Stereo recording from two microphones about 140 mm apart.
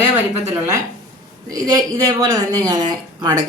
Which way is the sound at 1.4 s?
25° right (ahead or behind).